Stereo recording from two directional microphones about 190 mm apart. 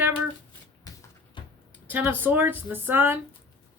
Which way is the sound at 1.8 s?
10° right (ahead or behind).